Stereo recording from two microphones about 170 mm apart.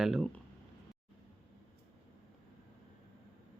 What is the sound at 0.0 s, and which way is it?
Speech, centre (ahead or behind).